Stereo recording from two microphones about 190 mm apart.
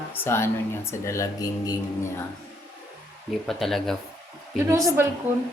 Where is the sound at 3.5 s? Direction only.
Centre (ahead or behind).